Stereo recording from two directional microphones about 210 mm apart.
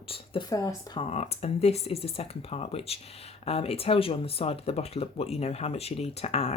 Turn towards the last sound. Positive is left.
turn(degrees=30)  # may be behind; listen again after turning